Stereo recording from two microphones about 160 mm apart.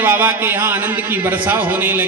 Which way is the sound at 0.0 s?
10° right (ahead or behind).